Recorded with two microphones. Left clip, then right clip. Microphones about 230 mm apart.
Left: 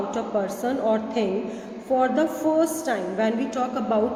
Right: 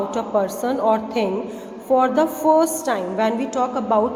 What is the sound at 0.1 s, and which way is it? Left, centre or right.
A woman's voice, centre.